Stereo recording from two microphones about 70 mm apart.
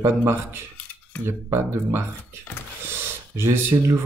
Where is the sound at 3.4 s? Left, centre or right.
Right.